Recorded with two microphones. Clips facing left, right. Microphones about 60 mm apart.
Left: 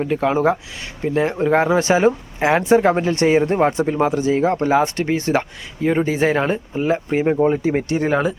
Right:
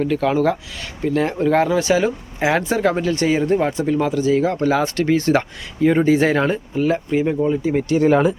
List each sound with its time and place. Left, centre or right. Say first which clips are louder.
0.0 s speech: even; left
2.4 s speech: left 3 dB; centre
4.7 s speech: even; left
5.3 s speech: right 2 dB; centre
6.7 s speech: right 1 dB; left
7.9 s speech: right 6 dB; centre